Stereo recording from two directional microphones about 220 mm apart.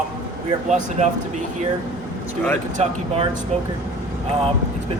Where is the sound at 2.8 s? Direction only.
30° right (ahead or behind).